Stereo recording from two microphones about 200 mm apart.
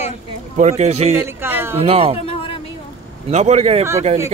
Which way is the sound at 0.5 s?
35° right (ahead or behind).